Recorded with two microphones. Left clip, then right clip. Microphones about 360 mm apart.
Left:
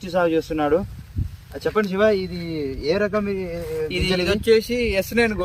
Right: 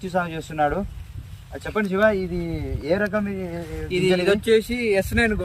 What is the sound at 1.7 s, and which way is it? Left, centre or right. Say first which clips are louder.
A man's voice: left 1 dB; centre.